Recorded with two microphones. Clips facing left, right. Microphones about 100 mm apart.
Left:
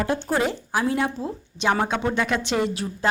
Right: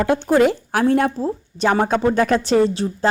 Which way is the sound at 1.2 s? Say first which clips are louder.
Right 7 dB; 35° right (ahead or behind).